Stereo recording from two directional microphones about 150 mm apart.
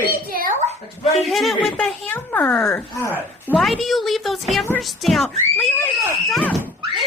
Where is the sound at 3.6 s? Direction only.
Centre (ahead or behind).